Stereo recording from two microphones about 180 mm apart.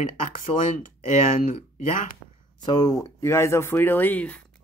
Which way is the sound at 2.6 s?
20° left (ahead or behind).